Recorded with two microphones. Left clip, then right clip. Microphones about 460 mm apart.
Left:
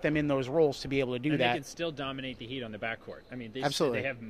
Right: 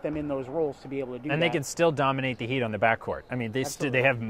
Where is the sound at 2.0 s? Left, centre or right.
Right.